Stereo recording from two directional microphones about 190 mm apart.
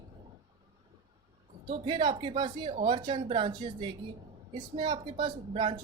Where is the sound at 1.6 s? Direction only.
25° right (ahead or behind).